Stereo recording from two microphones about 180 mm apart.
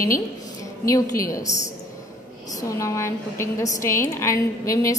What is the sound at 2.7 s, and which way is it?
A woman's voice, 15° left (ahead or behind).